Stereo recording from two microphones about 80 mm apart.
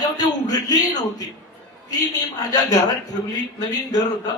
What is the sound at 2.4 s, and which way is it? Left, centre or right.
A man's voice, left.